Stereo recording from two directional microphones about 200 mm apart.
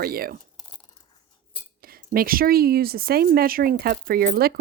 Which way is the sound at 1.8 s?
45° right (ahead or behind).